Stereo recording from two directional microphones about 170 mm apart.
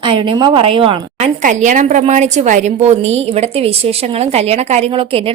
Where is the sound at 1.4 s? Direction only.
50° right (ahead or behind).